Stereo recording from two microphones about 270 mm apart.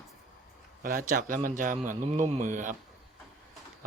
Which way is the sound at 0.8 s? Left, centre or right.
Right.